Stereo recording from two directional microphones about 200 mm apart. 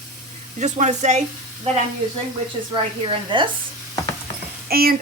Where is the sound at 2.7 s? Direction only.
25° right (ahead or behind).